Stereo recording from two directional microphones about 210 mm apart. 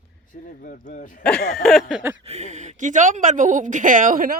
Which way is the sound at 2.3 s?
35° right (ahead or behind).